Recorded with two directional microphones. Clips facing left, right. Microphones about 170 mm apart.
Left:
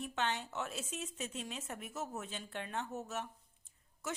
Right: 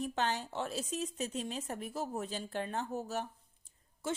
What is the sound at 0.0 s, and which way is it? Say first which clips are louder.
A woman's voice: right 3 dB; 35° right (ahead or behind).